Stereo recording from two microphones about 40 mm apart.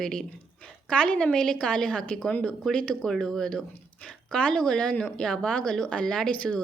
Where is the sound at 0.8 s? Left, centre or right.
Left.